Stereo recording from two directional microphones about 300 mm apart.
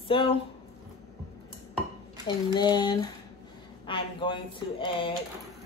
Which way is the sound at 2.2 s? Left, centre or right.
Centre.